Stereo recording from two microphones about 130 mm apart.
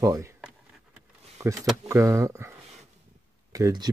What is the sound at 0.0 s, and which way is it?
Speech, 25° right (ahead or behind).